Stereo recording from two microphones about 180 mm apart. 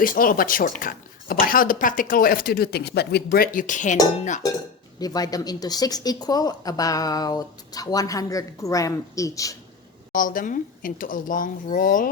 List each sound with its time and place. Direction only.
0.0 s speech: 50° left (ahead or behind)
4.9 s speech: 20° left (ahead or behind)
10.1 s speech: 50° left (ahead or behind)